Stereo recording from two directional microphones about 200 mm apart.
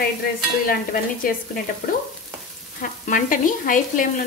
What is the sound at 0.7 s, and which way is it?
Stir, 45° left (ahead or behind).